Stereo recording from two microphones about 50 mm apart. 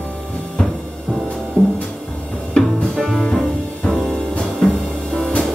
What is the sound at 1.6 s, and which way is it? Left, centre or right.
Music, left.